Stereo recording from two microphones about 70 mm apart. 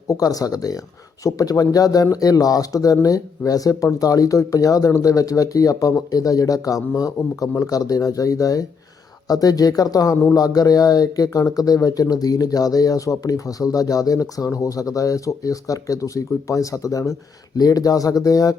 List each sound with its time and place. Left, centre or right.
0.1 s speech: left